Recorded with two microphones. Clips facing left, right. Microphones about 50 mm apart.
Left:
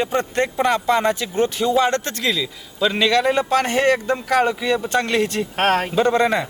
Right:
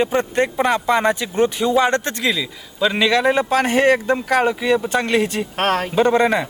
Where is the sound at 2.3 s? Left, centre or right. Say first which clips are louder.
Even; centre.